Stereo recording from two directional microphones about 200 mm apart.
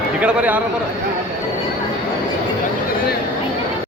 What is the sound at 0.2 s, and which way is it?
Speech, 5° right (ahead or behind).